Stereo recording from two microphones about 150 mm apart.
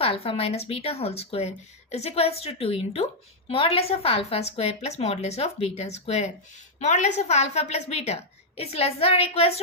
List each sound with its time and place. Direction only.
0.0 s a woman's voice: 40° left (ahead or behind)